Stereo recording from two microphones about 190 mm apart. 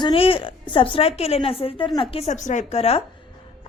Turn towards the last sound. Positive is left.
turn(degrees=30)  # may be behind; listen again after turning